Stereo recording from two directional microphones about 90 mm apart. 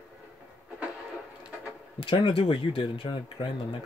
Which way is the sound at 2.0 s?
70° left (ahead or behind).